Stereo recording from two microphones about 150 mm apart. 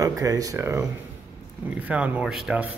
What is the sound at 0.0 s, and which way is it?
Speech, 25° right (ahead or behind).